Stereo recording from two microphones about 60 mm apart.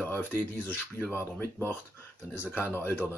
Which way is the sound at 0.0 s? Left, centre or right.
Left.